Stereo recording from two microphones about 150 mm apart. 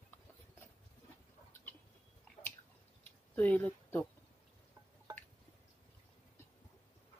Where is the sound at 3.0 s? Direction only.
10° left (ahead or behind).